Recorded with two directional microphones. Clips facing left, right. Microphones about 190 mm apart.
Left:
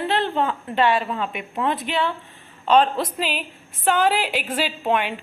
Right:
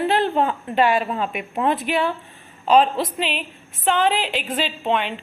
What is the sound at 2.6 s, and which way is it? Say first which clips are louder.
A woman's voice: right 1 dB; 5° right (ahead or behind).